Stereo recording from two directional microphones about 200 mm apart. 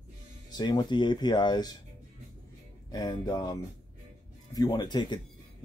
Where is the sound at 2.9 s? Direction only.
20° left (ahead or behind).